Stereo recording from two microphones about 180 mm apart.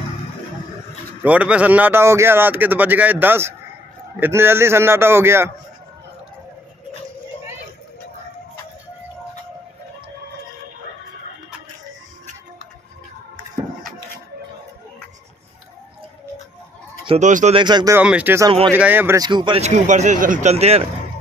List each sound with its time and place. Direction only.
1.2 s speech: 10° right (ahead or behind)
17.2 s speech: 45° right (ahead or behind)
17.6 s speech: 25° right (ahead or behind)
17.9 s speech: 10° right (ahead or behind)
19.2 s speech: 25° right (ahead or behind)
19.6 s speech: 40° right (ahead or behind)